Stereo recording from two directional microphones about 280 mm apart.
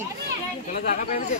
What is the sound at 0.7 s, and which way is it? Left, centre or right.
Speech, left.